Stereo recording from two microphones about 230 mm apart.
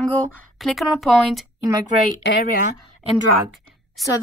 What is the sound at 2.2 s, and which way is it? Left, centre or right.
Speech, left.